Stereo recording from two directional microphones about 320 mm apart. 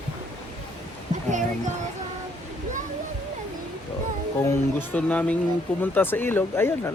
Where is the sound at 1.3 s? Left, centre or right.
Right.